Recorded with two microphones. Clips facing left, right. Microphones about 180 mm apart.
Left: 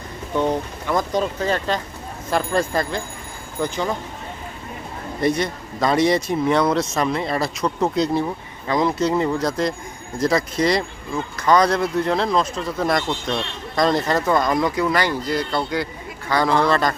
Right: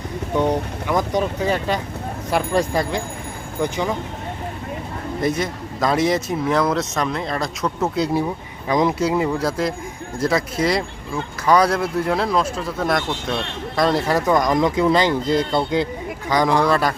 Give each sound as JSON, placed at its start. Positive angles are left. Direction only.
{"t": 0.3, "sound": "speech", "side_deg": -15}
{"t": 5.2, "sound": "speech", "side_deg": 0}